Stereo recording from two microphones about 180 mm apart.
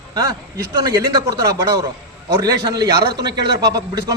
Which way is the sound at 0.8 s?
20° right (ahead or behind).